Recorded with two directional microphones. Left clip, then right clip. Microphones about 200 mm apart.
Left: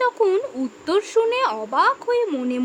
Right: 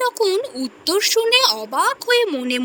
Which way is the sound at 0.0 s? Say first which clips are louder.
Even; centre (ahead or behind).